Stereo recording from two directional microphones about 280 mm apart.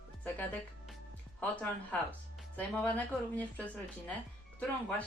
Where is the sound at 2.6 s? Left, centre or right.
Centre.